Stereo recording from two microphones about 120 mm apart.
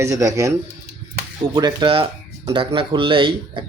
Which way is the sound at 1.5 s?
40° right (ahead or behind).